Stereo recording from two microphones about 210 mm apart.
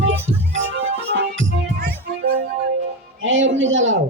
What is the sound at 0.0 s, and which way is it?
Music, 65° right (ahead or behind).